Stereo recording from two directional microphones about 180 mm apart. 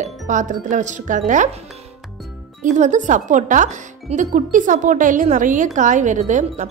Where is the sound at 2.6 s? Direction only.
45° right (ahead or behind).